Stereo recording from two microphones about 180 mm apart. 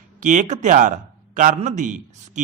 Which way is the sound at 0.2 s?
45° right (ahead or behind).